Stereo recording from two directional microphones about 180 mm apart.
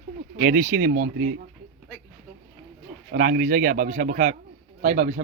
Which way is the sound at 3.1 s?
50° right (ahead or behind).